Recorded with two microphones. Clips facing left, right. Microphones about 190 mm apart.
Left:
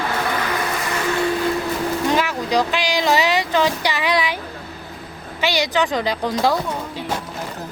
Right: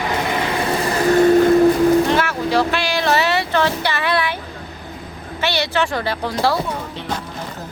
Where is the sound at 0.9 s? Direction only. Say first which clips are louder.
Right 10 dB; 40° right (ahead or behind).